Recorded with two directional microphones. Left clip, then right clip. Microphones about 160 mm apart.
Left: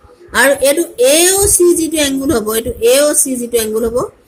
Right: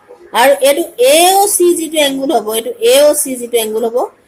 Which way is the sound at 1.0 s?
45° left (ahead or behind).